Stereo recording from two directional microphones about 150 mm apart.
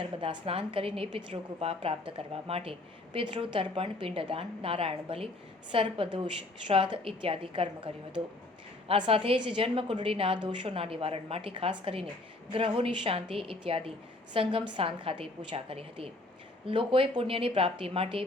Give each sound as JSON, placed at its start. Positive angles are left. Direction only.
{"t": 0.0, "sound": "a woman's voice", "side_deg": -35}